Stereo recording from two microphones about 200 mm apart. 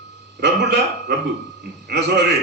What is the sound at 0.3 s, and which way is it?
A man's voice, 55° right (ahead or behind).